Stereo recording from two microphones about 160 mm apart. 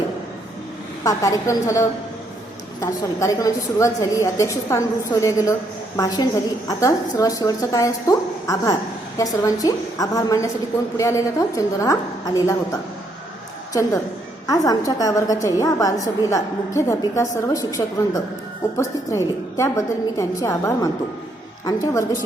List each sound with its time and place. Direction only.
1.0 s a woman's voice: 20° left (ahead or behind)
14.4 s a woman's voice: 20° left (ahead or behind)